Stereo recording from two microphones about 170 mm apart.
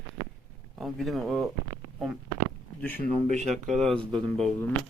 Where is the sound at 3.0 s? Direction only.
45° right (ahead or behind).